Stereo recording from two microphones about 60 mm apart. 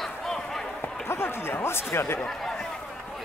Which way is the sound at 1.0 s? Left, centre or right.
Left.